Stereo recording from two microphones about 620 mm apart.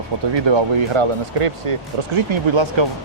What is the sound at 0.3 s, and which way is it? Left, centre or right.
Speech, right.